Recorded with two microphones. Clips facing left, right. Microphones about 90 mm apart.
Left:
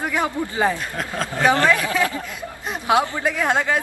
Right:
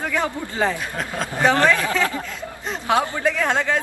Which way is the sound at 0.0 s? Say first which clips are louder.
Left 1 dB; 15° left (ahead or behind).